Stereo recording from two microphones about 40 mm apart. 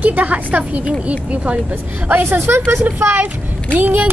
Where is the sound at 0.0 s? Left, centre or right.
Right.